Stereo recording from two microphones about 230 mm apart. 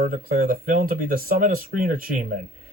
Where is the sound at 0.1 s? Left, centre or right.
Right.